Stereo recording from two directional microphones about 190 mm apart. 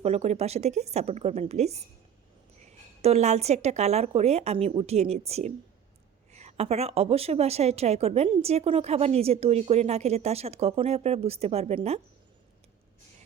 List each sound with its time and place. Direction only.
0.0 s a woman's voice: 35° right (ahead or behind)